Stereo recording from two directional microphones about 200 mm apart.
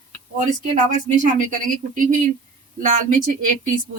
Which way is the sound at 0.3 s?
40° right (ahead or behind).